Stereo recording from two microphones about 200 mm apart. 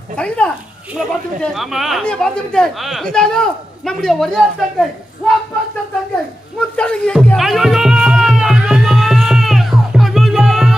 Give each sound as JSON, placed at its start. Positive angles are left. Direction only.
{"t": 0.2, "sound": "speech", "side_deg": 5}
{"t": 6.7, "sound": "music", "side_deg": 5}